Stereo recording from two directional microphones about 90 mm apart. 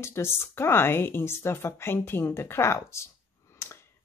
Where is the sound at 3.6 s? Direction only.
35° left (ahead or behind).